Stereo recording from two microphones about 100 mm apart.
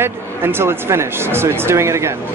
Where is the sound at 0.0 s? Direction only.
25° right (ahead or behind).